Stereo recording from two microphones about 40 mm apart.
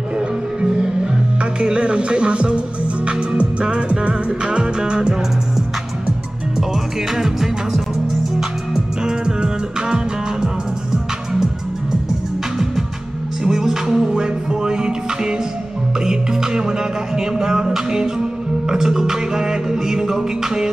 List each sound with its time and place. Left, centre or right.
1.4 s music: right
7.2 s music: centre
9.0 s music: right
13.4 s music: centre